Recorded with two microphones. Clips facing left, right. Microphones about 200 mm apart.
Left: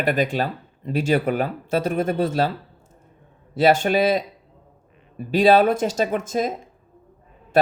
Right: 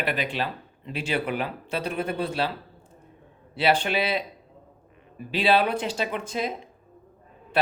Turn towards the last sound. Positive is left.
turn(degrees=45)  # may be behind; listen again after turning